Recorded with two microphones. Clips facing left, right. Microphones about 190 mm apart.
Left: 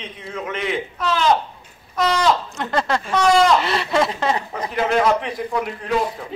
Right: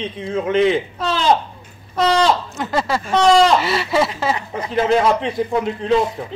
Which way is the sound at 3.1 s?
30° right (ahead or behind).